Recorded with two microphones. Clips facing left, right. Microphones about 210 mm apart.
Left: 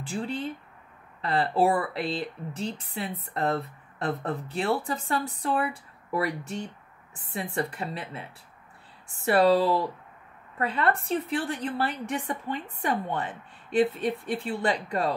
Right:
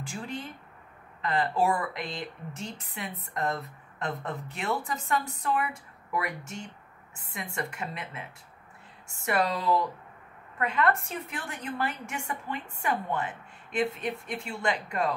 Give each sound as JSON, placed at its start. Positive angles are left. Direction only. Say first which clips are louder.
{"t": 0.0, "sound": "speech", "louder": "left 6 dB", "side_deg": 35}